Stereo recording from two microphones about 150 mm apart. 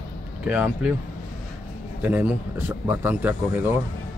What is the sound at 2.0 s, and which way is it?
Speech, 10° right (ahead or behind).